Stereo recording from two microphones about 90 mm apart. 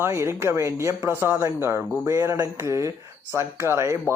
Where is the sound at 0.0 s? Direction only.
35° right (ahead or behind).